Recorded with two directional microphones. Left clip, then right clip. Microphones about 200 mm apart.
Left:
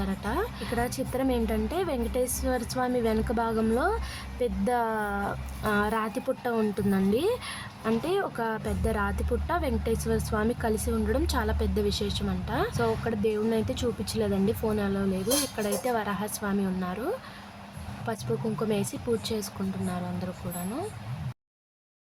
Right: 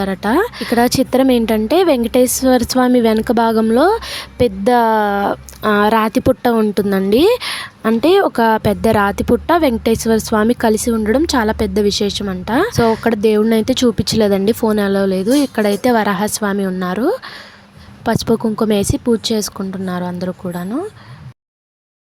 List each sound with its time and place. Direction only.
0.0 s speech: 45° right (ahead or behind)